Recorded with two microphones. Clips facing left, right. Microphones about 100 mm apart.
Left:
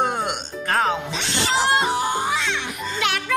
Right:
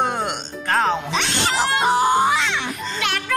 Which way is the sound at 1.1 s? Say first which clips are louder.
Right 1 dB; 65° right (ahead or behind).